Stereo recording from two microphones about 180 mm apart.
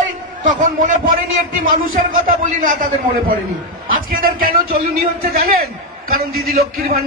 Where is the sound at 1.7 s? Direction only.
50° right (ahead or behind).